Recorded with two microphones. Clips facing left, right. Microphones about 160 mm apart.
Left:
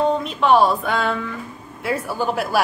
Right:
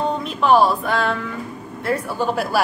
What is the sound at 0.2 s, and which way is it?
A woman's voice, centre (ahead or behind).